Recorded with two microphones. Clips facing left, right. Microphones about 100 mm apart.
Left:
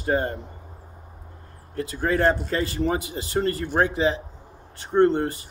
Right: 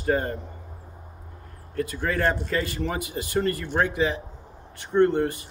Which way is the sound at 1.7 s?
25° left (ahead or behind).